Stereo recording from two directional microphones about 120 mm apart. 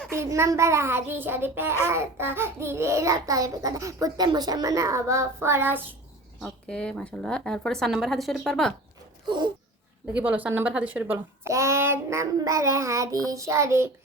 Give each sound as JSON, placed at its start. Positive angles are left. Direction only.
{"t": 0.1, "sound": "a child's voice", "side_deg": -20}
{"t": 6.4, "sound": "speech", "side_deg": 5}
{"t": 10.1, "sound": "speech", "side_deg": -15}
{"t": 11.4, "sound": "a child's voice", "side_deg": -25}